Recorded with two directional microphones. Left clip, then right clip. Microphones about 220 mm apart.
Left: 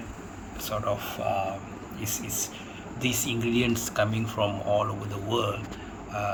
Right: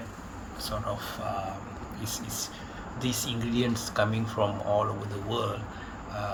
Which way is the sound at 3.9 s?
Centre (ahead or behind).